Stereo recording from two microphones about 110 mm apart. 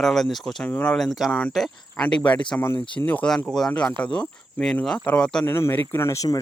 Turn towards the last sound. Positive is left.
turn(degrees=30)  # may be behind; listen again after turning